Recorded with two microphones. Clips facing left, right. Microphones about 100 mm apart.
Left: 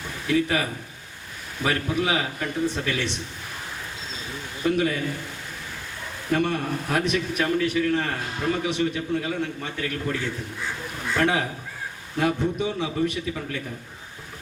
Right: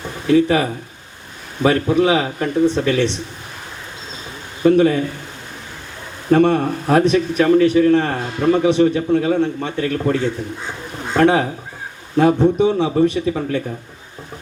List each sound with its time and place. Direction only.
0.0 s a sound: 30° right (ahead or behind)
1.6 s a man's voice: 30° right (ahead or behind)
4.6 s a man's voice: 30° right (ahead or behind)
6.3 s a man's voice: 35° right (ahead or behind)